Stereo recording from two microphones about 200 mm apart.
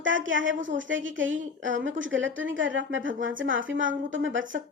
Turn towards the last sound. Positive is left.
turn(degrees=-70)  # may be behind; listen again after turning